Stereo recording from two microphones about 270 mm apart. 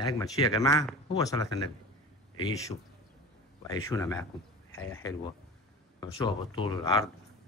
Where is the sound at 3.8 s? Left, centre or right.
Centre.